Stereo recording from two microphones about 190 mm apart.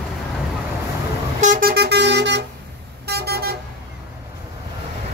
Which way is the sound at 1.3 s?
40° right (ahead or behind).